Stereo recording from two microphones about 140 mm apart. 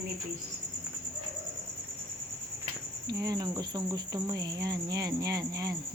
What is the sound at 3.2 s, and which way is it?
Speech, 30° right (ahead or behind).